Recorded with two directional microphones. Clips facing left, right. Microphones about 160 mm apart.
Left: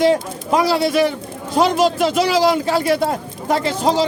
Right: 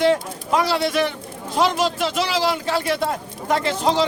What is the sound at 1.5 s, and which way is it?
Speech, 40° left (ahead or behind).